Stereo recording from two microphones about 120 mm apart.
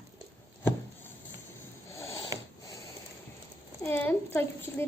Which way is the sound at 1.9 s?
25° left (ahead or behind).